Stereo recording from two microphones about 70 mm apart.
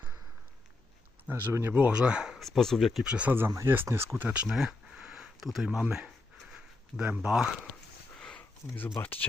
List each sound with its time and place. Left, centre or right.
1.3 s speech: right
1.7 s speech: centre
2.4 s speech: centre
3.0 s speech: centre
3.3 s speech: right
4.2 s speech: right
4.4 s a sound: centre
5.6 s speech: centre
6.5 s a sound: centre
7.3 s speech: centre
8.2 s a sound: centre
9.0 s speech: left